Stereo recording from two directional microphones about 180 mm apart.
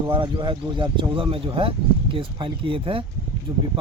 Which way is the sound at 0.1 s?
30° right (ahead or behind).